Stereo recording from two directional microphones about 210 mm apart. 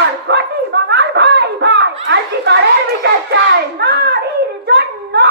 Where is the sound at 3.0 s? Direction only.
55° right (ahead or behind).